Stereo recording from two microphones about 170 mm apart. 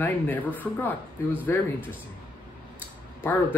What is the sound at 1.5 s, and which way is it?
Speech, 15° left (ahead or behind).